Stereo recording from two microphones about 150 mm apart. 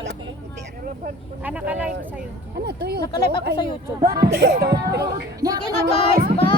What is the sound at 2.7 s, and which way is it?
Speech, 90° right.